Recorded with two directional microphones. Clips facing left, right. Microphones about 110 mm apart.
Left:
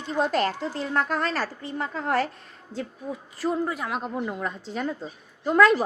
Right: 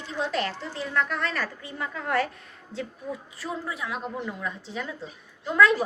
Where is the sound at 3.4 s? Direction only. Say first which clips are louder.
Left 9 dB; 45° left (ahead or behind).